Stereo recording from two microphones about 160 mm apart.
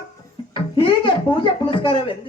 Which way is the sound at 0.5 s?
30° left (ahead or behind).